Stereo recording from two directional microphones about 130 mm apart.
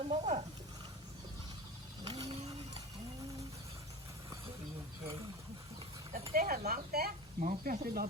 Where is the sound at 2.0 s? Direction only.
30° right (ahead or behind).